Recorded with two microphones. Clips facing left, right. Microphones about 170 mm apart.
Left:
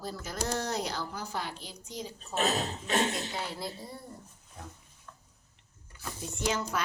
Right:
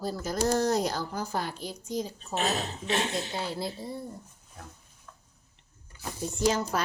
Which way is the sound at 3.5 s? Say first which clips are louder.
Right 5 dB; 25° right (ahead or behind).